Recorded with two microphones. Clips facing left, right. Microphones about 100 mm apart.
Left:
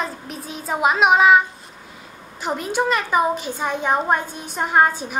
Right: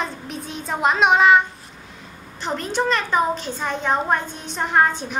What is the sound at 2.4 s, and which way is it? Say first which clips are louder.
A child's voice: left 1 dB; 10° left (ahead or behind).